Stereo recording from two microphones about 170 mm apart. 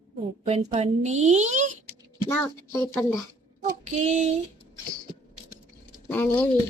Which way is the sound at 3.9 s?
45° right (ahead or behind).